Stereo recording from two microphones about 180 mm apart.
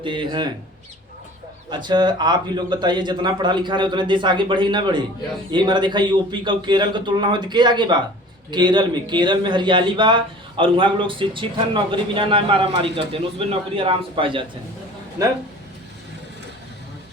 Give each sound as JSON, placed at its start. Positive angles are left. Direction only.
{"t": 0.0, "sound": "a man's voice", "side_deg": -25}
{"t": 1.7, "sound": "a man's voice", "side_deg": -25}